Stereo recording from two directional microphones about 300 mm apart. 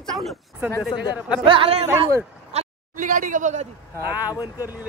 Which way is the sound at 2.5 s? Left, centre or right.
Right.